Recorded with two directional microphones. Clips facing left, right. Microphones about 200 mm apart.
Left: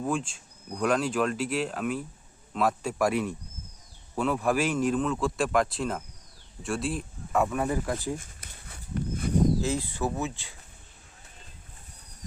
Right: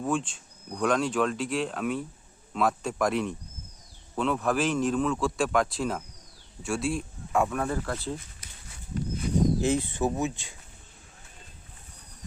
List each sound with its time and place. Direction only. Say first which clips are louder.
0.3 s speech: even; 5° left (ahead or behind)
7.7 s speech: left 2 dB; 15° left (ahead or behind)
8.2 s a sound: left 2 dB; 55° left (ahead or behind)
9.6 s speech: right 3 dB; 20° right (ahead or behind)